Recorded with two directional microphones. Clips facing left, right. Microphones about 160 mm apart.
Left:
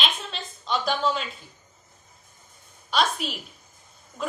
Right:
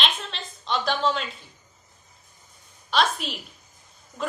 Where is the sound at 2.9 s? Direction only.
Centre (ahead or behind).